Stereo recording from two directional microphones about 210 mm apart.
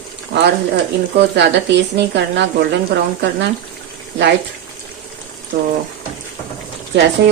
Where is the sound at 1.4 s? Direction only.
55° right (ahead or behind).